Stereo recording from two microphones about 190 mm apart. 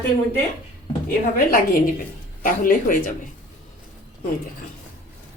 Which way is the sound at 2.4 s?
45° left (ahead or behind).